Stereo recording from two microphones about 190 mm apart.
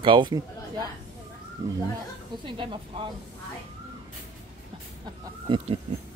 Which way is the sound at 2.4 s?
25° right (ahead or behind).